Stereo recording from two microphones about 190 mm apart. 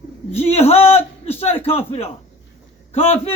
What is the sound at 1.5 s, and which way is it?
Speech, 10° left (ahead or behind).